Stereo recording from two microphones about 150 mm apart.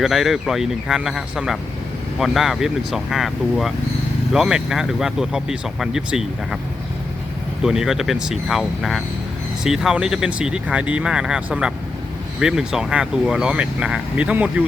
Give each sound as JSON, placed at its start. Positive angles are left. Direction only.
{"t": 0.0, "sound": "speech", "side_deg": 0}
{"t": 7.6, "sound": "speech", "side_deg": -5}